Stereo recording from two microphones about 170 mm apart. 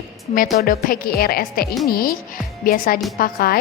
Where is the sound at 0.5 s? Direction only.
55° left (ahead or behind).